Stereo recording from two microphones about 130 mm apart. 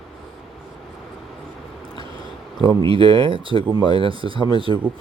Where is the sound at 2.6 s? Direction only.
40° right (ahead or behind).